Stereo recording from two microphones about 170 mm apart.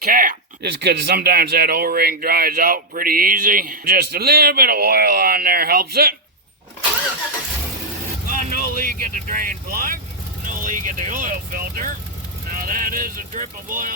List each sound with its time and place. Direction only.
0.0 s a sound: 55° right (ahead or behind)
0.8 s speech: 70° right (ahead or behind)
8.3 s speech: 55° right (ahead or behind)